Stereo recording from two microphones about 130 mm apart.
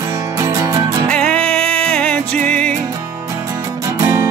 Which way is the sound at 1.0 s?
5° left (ahead or behind).